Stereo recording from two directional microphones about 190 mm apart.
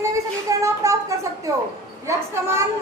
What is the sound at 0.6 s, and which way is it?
A woman's voice, 15° right (ahead or behind).